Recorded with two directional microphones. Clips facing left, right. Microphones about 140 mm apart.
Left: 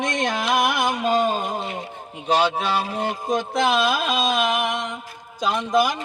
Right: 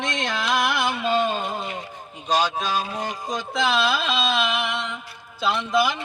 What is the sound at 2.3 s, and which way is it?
Speech, 65° left (ahead or behind).